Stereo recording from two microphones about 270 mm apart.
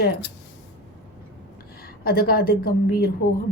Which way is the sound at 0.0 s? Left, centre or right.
Left.